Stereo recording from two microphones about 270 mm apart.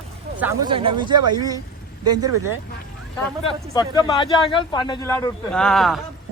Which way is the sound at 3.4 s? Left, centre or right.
Centre.